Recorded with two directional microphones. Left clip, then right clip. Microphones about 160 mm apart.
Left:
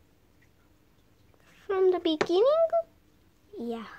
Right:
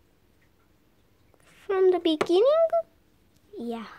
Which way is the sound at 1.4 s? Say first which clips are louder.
Right 3 dB; 20° right (ahead or behind).